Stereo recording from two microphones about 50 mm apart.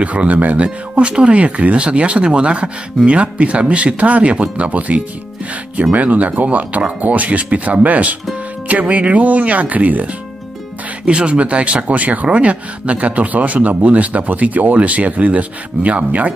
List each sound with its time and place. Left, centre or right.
0.0 s speech: right